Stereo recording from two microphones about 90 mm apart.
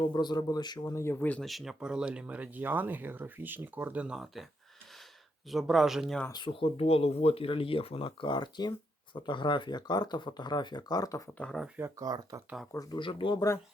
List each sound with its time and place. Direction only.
0.1 s speech: 50° left (ahead or behind)
0.9 s speech: 30° left (ahead or behind)
1.4 s speech: centre (ahead or behind)
5.5 s speech: centre (ahead or behind)
6.3 s speech: 75° left (ahead or behind); by 11.2 s 45° left (ahead or behind)
11.3 s speech: 15° left (ahead or behind)
11.9 s speech: 45° right (ahead or behind)
12.7 s speech: 45° left (ahead or behind)
13.0 s speech: 70° left (ahead or behind)